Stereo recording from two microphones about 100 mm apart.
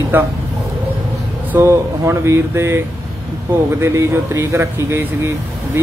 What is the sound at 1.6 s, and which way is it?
Speech, 30° right (ahead or behind).